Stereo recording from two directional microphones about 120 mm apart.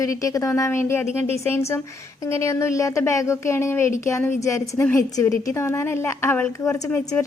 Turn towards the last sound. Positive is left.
turn(degrees=15)  # may be behind; listen again after turning